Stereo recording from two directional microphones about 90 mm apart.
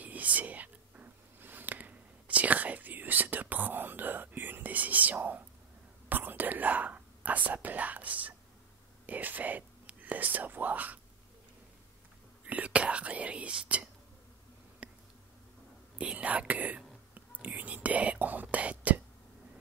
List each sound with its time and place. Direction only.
0.0 s whispering: 15° right (ahead or behind)
12.4 s whispering: 15° right (ahead or behind)
14.8 s a sound: 15° right (ahead or behind)
16.0 s whispering: 15° right (ahead or behind)